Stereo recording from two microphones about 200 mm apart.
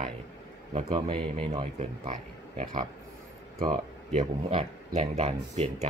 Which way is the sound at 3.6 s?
35° right (ahead or behind).